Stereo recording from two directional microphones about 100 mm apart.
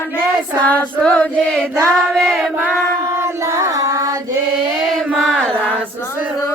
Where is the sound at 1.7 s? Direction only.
25° right (ahead or behind).